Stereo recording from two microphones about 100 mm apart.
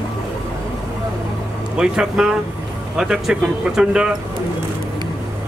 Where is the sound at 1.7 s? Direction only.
10° right (ahead or behind).